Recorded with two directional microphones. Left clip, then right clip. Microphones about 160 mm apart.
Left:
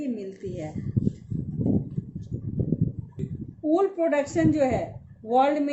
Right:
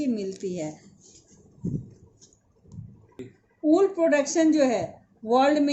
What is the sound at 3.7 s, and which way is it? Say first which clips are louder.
Speech: right 2 dB; 75° right (ahead or behind).